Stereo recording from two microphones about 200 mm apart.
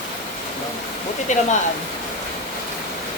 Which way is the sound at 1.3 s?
35° left (ahead or behind).